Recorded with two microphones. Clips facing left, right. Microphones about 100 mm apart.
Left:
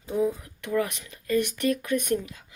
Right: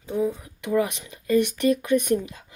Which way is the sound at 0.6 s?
15° right (ahead or behind).